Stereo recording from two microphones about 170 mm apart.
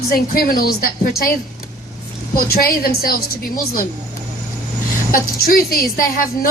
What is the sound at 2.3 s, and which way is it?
A woman's voice, 60° left (ahead or behind).